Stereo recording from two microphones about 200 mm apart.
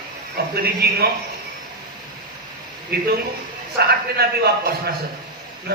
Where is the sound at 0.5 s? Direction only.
50° right (ahead or behind).